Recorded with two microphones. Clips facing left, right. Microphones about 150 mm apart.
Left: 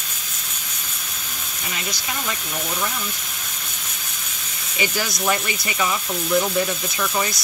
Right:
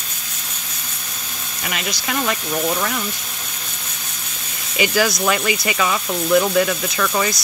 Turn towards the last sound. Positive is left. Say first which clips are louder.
# right 4 dB
turn(degrees=-75)  # may be behind; listen again after turning